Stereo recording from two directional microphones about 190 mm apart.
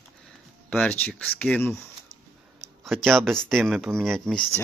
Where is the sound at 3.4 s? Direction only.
5° left (ahead or behind).